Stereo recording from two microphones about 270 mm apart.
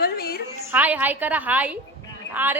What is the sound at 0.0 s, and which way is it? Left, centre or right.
Music, left.